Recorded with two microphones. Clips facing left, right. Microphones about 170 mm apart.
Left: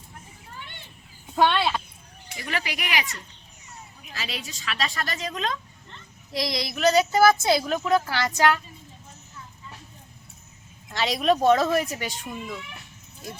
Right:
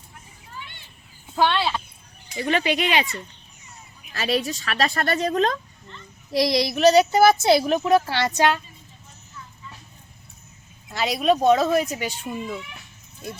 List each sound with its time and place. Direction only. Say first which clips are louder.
1.5 s a woman's voice: even; 5° left (ahead or behind)
2.4 s speech: right 9 dB; 25° right (ahead or behind)
4.1 s a woman's voice: right 12 dB; 55° right (ahead or behind)
6.4 s speech: right 6 dB; 30° right (ahead or behind)
10.8 s speech: right 2 dB; 5° right (ahead or behind)